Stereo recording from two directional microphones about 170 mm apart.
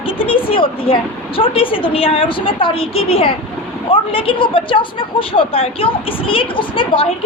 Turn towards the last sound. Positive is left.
turn(degrees=30)  # may be behind; listen again after turning